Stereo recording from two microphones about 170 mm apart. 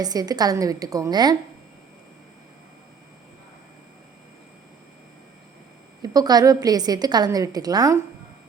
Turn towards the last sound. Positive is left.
turn(degrees=-20)  # may be behind; listen again after turning